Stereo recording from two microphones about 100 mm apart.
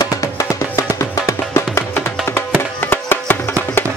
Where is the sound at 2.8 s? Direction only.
20° left (ahead or behind).